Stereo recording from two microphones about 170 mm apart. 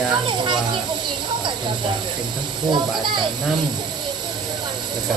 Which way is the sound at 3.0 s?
25° right (ahead or behind).